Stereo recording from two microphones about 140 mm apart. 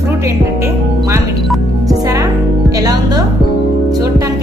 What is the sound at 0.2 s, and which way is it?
Music, 20° right (ahead or behind).